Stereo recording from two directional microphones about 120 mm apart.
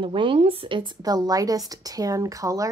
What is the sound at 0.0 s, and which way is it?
A woman's voice, 45° right (ahead or behind).